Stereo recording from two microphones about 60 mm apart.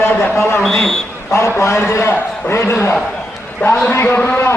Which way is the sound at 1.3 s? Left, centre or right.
Left.